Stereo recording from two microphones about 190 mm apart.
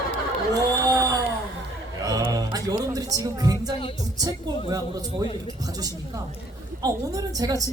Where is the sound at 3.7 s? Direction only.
30° left (ahead or behind).